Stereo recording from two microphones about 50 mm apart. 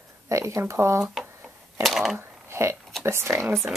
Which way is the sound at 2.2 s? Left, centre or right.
Right.